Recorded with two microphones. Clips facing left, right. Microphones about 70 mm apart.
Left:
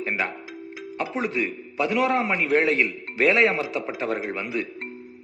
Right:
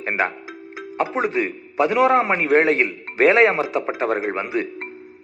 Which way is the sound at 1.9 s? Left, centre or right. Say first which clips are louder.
Right 5 dB; right.